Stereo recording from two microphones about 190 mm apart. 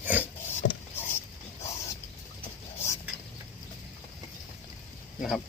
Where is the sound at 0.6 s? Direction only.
70° left (ahead or behind).